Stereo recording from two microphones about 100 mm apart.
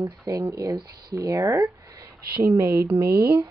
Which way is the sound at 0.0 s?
35° right (ahead or behind).